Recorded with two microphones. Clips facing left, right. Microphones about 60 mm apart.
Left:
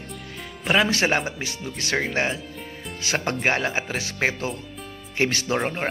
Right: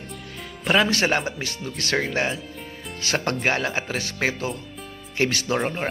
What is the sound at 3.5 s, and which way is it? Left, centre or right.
Speech, left.